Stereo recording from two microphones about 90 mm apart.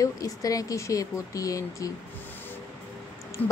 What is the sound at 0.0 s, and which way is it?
Speech, 40° left (ahead or behind).